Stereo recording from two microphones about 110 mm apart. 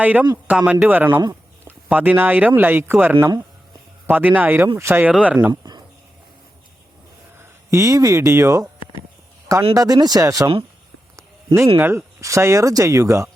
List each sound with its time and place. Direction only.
0.0 s speech: 15° right (ahead or behind)
5.5 s a sound: 40° right (ahead or behind)
7.3 s speech: 30° right (ahead or behind)
9.7 s speech: 35° right (ahead or behind)
11.2 s a sound: 25° right (ahead or behind)
11.8 s speech: 20° right (ahead or behind)